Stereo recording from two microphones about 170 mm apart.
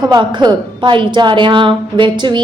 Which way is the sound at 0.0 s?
25° right (ahead or behind).